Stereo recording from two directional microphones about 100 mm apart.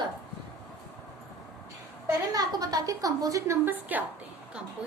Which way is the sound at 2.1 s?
40° right (ahead or behind).